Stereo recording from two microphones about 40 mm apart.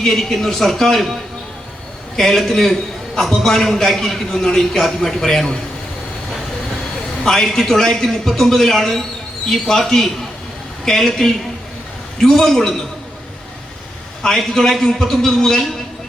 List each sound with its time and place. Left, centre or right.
0.1 s a man's voice: centre
2.1 s a man's voice: centre
7.3 s a man's voice: centre
12.4 s a man's voice: centre
14.3 s a man's voice: centre